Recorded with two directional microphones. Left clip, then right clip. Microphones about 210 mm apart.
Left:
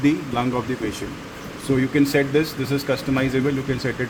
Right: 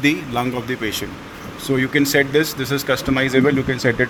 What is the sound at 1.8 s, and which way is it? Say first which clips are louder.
Speech: right 3 dB; 30° right (ahead or behind).